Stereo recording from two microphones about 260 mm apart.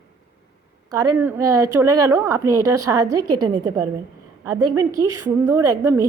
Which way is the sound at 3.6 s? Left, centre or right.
Centre.